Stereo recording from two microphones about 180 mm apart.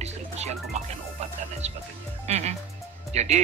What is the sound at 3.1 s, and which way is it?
Speech, 35° right (ahead or behind).